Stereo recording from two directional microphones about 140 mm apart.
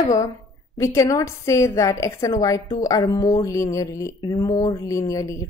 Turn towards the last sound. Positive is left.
turn(degrees=25)  # may be behind; listen again after turning